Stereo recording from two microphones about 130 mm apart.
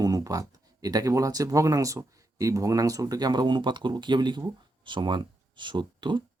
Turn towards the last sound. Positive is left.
turn(degrees=-35)  # may be behind; listen again after turning